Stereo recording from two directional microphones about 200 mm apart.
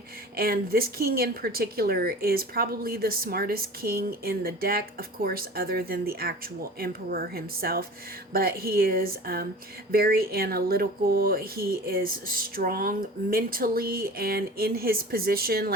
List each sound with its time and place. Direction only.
0.3 s speech: 50° right (ahead or behind)